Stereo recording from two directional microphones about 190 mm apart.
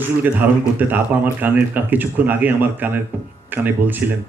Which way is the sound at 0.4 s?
10° right (ahead or behind).